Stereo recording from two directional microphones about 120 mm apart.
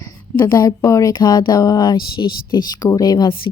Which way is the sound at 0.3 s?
35° left (ahead or behind).